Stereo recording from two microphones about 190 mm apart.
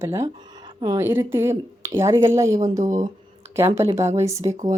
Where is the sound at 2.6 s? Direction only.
40° right (ahead or behind).